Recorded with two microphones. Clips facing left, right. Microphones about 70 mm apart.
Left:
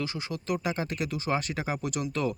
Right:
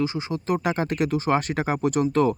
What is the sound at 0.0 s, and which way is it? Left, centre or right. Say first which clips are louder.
Speech: right 8 dB; right.